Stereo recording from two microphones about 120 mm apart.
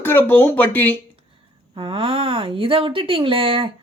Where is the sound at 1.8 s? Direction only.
45° right (ahead or behind).